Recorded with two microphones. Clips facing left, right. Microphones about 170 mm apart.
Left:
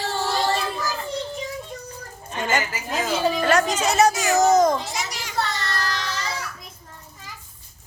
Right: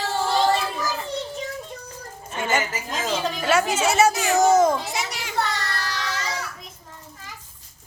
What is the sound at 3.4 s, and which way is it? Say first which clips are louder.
A woman's voice: right 3 dB; 5° right (ahead or behind).